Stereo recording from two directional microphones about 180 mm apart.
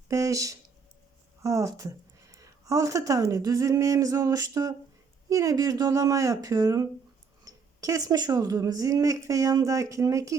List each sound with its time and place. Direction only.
0.1 s speech: 15° right (ahead or behind)